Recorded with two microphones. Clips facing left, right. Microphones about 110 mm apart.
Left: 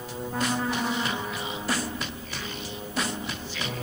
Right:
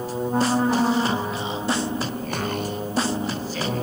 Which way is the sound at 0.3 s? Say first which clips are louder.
Right 7 dB; 35° right (ahead or behind).